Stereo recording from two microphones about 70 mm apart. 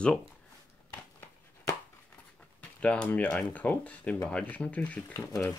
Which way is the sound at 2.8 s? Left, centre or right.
Centre.